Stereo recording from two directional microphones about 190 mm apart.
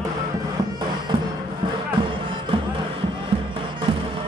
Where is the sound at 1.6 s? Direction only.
25° right (ahead or behind).